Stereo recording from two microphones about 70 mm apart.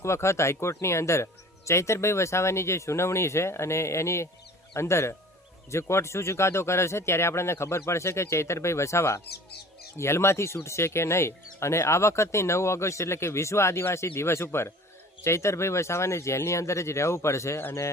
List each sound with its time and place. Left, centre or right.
0.0 s speech: left